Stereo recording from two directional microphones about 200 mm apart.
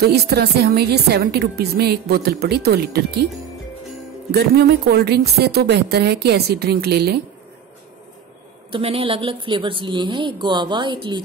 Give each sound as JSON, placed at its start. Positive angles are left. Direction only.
{"t": 0.0, "sound": "a woman's voice", "side_deg": -55}
{"t": 4.3, "sound": "a woman's voice", "side_deg": -55}
{"t": 8.7, "sound": "a woman's voice", "side_deg": -25}